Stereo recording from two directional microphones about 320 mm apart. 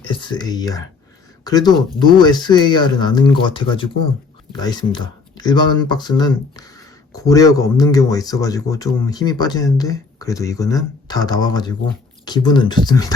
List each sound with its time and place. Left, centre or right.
0.0 s speech: centre